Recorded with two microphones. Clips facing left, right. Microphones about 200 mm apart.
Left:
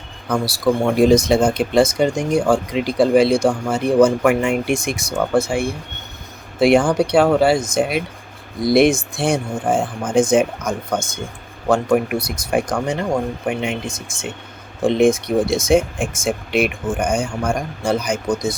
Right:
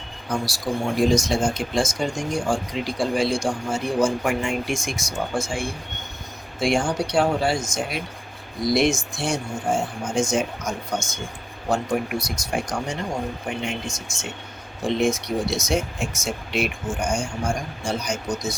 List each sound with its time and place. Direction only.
0.3 s speech: 60° left (ahead or behind)